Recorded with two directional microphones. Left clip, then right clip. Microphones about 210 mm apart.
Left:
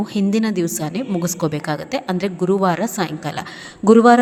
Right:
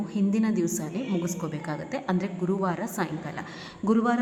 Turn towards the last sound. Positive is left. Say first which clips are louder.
# left 15 dB
turn(degrees=35)  # may be behind; listen again after turning